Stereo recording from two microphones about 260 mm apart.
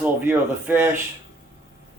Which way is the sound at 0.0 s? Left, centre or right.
Centre.